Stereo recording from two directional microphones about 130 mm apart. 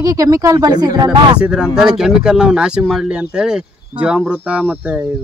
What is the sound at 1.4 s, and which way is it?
Speech, 5° right (ahead or behind).